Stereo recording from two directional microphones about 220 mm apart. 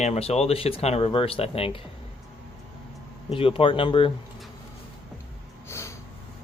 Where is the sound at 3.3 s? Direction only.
25° left (ahead or behind).